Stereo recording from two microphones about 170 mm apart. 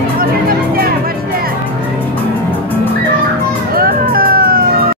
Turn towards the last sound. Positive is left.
turn(degrees=-60)  # may be behind; listen again after turning